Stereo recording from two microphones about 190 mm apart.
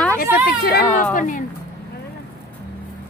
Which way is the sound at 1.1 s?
45° left (ahead or behind).